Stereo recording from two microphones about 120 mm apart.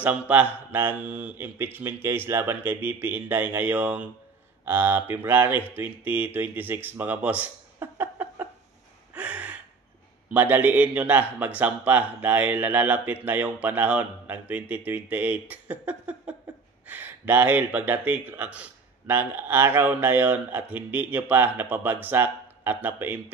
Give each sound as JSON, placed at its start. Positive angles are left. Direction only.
{"t": 0.0, "sound": "speech", "side_deg": -15}
{"t": 8.0, "sound": "a sound", "side_deg": -15}
{"t": 9.1, "sound": "gasp", "side_deg": -10}
{"t": 10.3, "sound": "speech", "side_deg": -15}